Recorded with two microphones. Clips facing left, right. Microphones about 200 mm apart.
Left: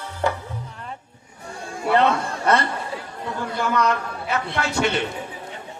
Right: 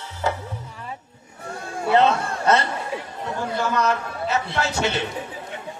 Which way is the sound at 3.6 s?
25° right (ahead or behind).